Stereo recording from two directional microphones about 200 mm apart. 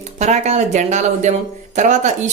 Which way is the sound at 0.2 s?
35° right (ahead or behind).